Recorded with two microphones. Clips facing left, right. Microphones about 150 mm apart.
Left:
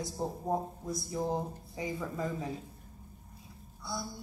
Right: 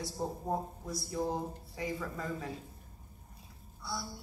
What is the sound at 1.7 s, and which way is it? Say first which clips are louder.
Speech: left 2 dB; 20° left (ahead or behind).